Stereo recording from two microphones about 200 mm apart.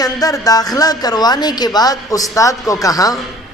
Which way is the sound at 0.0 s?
20° left (ahead or behind).